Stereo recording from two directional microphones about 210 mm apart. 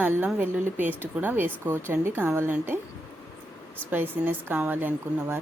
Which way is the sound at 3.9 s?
10° right (ahead or behind).